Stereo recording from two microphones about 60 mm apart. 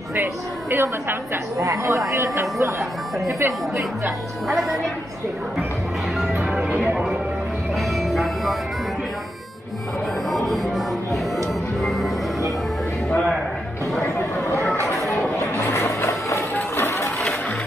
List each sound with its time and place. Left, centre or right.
0.1 s a woman's voice: right
1.6 s speech: right
4.5 s a woman's voice: centre
7.9 s music: centre
10.3 s music: centre
11.8 s music: centre
13.1 s music: centre
15.0 s a sound: left